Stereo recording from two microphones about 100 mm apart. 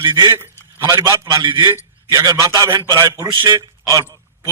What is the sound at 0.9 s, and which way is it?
A man's voice, 30° right (ahead or behind).